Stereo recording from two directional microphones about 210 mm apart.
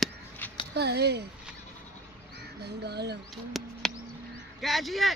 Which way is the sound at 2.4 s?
50° right (ahead or behind).